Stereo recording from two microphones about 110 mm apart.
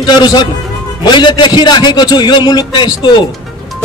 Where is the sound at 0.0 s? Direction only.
45° left (ahead or behind).